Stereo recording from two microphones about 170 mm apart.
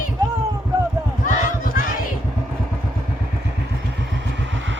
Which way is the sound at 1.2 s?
55° left (ahead or behind).